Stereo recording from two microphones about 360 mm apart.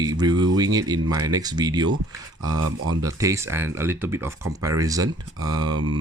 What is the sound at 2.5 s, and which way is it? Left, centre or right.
Speech, right.